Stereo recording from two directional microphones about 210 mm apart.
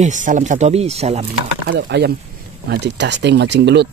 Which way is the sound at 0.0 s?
35° right (ahead or behind).